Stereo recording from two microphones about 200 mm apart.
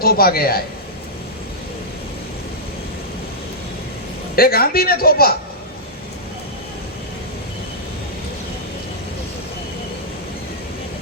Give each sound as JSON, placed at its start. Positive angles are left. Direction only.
{"t": 0.0, "sound": "speech", "side_deg": 50}
{"t": 4.4, "sound": "speech", "side_deg": 50}